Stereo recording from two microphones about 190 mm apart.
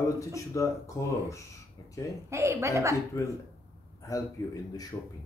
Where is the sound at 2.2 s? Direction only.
15° right (ahead or behind).